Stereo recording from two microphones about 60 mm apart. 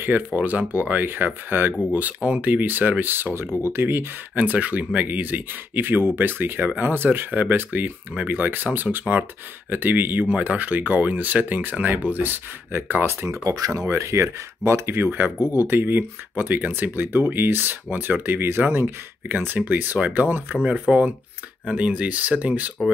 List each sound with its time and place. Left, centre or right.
0.0 s speech: right
4.4 s speech: right
8.9 s speech: centre
9.7 s speech: right
13.4 s speech: right
20.6 s speech: right